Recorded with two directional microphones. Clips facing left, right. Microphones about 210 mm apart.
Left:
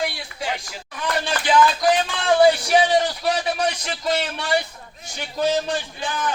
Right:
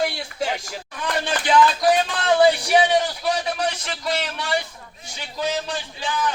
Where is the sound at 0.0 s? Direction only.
45° right (ahead or behind).